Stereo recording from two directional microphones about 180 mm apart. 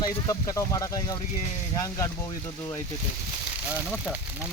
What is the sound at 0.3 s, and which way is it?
Speech, 20° left (ahead or behind).